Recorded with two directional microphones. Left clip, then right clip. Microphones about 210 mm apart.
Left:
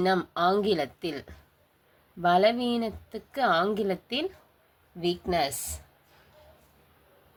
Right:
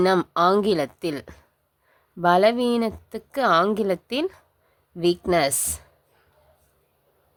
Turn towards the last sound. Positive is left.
turn(degrees=-45)  # may be behind; listen again after turning